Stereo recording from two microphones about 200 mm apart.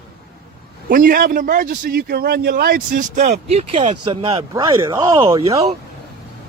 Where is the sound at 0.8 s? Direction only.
45° right (ahead or behind); by 4.4 s 30° right (ahead or behind).